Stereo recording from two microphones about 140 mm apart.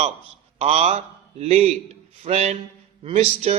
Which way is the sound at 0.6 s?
45° right (ahead or behind).